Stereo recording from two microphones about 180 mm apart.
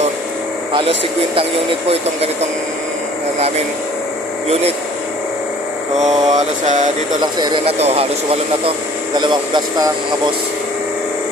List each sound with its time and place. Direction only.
0.7 s mantra: 30° right (ahead or behind)
3.3 s mantra: 35° right (ahead or behind)
5.9 s mantra: 40° right (ahead or behind)
7.2 s speech: 25° right (ahead or behind)
7.8 s mantra: 35° right (ahead or behind)
9.1 s speech: 25° right (ahead or behind)